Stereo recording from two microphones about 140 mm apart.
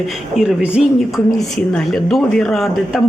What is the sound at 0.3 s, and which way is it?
Speech, 5° right (ahead or behind).